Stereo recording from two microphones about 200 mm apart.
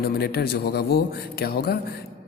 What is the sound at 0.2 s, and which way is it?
A man's voice, 50° left (ahead or behind).